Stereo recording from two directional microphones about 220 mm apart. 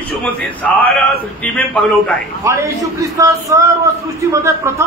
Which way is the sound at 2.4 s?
10° right (ahead or behind).